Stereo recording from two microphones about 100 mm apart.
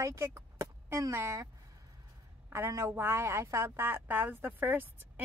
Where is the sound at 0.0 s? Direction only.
25° right (ahead or behind).